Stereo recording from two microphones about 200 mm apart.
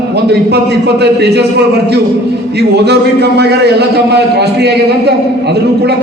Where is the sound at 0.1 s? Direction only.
55° right (ahead or behind).